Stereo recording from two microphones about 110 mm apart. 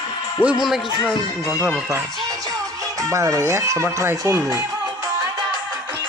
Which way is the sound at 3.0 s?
30° right (ahead or behind).